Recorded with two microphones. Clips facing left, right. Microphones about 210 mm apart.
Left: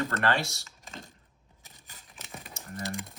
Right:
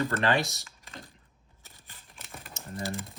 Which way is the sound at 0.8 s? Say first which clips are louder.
Left 1 dB; 45° left (ahead or behind).